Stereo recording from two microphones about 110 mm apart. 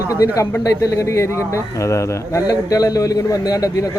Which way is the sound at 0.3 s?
30° left (ahead or behind).